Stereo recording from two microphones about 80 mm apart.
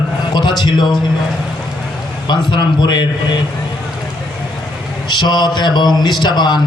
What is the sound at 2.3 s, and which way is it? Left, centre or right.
A man's voice, left.